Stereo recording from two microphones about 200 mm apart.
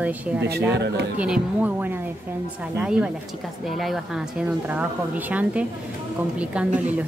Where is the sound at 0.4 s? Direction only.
55° right (ahead or behind).